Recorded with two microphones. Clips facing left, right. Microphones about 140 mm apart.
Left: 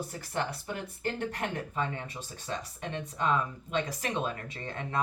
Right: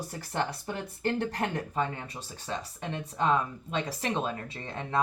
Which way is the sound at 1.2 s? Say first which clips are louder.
Right 3 dB; 35° right (ahead or behind).